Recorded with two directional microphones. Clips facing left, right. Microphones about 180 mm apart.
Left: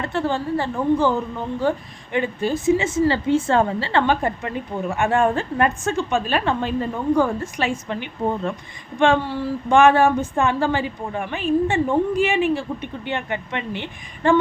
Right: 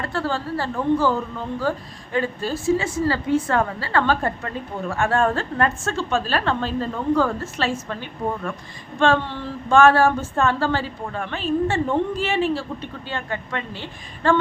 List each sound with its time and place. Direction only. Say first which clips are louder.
0.0 s a woman's voice: left 2 dB; 20° left (ahead or behind)